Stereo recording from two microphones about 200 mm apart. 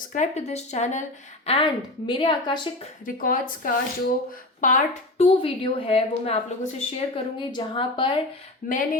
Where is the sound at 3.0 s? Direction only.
45° left (ahead or behind).